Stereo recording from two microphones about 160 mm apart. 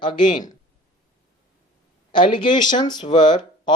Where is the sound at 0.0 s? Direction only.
30° left (ahead or behind).